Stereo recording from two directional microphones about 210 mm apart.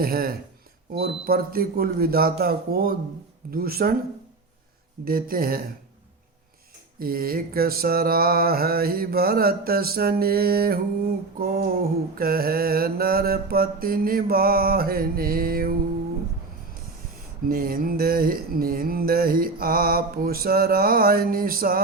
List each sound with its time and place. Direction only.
0.0 s mantra: 45° right (ahead or behind)
5.0 s mantra: 45° right (ahead or behind)
7.0 s mantra: 45° right (ahead or behind)
17.5 s mantra: 45° right (ahead or behind)